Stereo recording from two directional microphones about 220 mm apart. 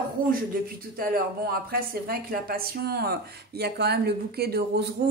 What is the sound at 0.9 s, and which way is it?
A woman's voice, 40° right (ahead or behind).